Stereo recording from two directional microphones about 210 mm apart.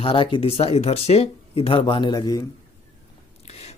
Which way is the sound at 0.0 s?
25° left (ahead or behind).